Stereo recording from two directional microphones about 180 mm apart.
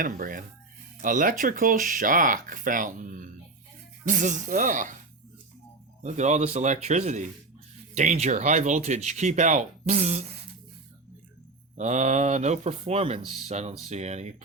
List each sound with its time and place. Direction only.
0.0 s speech: 50° right (ahead or behind)
6.0 s speech: 40° right (ahead or behind)
11.8 s speech: 40° right (ahead or behind)